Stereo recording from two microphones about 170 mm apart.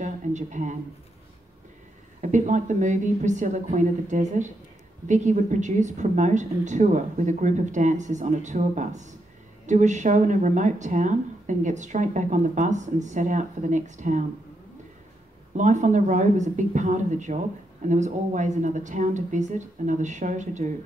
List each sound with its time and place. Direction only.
0.0 s a sound: 45° right (ahead or behind)
2.2 s speech: 45° right (ahead or behind)
15.5 s speech: 45° right (ahead or behind)